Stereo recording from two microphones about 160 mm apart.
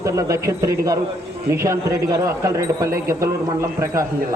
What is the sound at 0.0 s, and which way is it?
A man's voice, 20° right (ahead or behind).